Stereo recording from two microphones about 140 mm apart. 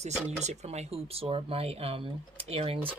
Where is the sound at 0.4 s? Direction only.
50° right (ahead or behind).